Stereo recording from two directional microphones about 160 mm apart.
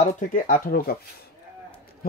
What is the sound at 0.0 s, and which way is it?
Speech, 55° left (ahead or behind).